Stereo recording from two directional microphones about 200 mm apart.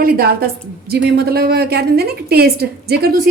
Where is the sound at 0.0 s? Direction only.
50° right (ahead or behind).